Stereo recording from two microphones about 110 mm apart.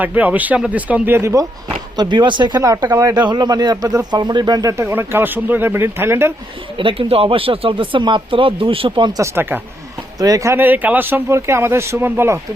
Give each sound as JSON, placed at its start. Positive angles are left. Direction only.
{"t": 0.0, "sound": "speech", "side_deg": -15}
{"t": 2.0, "sound": "speech", "side_deg": -45}
{"t": 2.6, "sound": "speech", "side_deg": -30}
{"t": 3.2, "sound": "speech", "side_deg": -40}
{"t": 4.8, "sound": "speech", "side_deg": -20}
{"t": 6.7, "sound": "speech", "side_deg": -50}
{"t": 9.0, "sound": "speech", "side_deg": -35}
{"t": 9.3, "sound": "speech", "side_deg": -20}
{"t": 10.2, "sound": "speech", "side_deg": -30}